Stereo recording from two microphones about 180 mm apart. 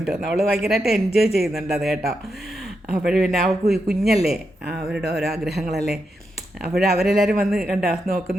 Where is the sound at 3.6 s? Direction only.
35° right (ahead or behind).